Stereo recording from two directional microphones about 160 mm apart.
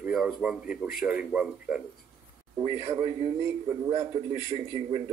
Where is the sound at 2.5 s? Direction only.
30° right (ahead or behind).